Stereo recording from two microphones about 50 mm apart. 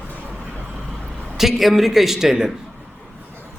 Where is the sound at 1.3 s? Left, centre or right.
Centre.